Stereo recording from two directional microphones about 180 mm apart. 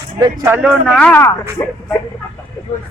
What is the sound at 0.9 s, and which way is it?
Speech, 5° left (ahead or behind).